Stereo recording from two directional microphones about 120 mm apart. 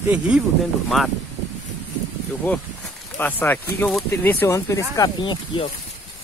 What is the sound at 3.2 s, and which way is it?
Speech, 15° left (ahead or behind).